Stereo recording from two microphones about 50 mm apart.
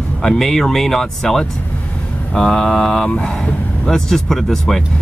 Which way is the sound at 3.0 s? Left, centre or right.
Left.